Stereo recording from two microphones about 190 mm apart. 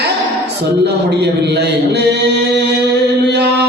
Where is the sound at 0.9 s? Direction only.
60° right (ahead or behind).